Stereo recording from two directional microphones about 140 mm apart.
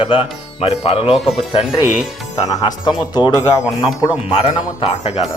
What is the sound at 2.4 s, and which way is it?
Speech, 25° left (ahead or behind).